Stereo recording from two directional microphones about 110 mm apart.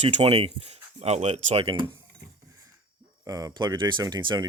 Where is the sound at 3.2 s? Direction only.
35° right (ahead or behind).